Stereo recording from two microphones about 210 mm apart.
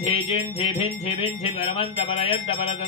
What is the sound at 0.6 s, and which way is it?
Music, 25° left (ahead or behind).